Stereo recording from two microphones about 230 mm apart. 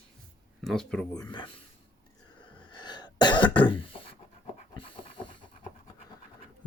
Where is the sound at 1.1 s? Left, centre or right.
Centre.